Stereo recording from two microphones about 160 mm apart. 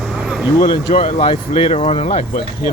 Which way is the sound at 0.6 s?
25° left (ahead or behind).